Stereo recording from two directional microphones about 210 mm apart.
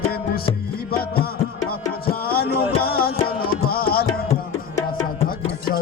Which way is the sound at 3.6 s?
45° left (ahead or behind).